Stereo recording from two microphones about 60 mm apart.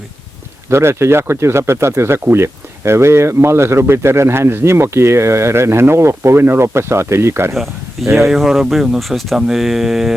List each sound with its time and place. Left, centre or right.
0.7 s speech: right
8.2 s speech: centre